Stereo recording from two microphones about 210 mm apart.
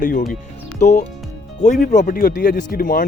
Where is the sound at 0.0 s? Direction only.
40° left (ahead or behind).